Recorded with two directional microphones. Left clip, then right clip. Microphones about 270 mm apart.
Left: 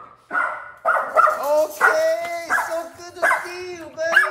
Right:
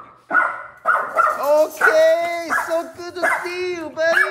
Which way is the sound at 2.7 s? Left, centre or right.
Centre.